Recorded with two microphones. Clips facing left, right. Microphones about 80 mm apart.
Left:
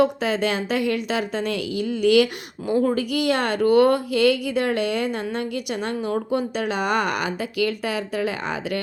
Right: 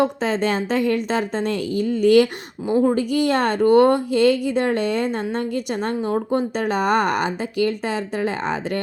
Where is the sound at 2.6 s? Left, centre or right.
Right.